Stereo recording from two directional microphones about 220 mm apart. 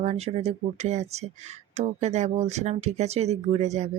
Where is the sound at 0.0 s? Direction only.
30° right (ahead or behind).